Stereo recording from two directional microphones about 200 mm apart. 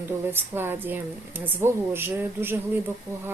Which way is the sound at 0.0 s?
10° right (ahead or behind).